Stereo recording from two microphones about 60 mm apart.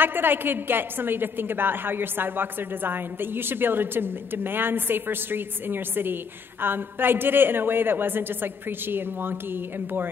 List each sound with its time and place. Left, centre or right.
0.0 s a woman's voice: right